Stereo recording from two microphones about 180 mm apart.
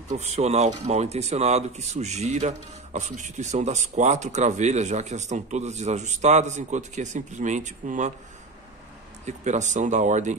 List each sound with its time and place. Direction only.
0.1 s speech: 40° right (ahead or behind)
9.2 s speech: 40° right (ahead or behind)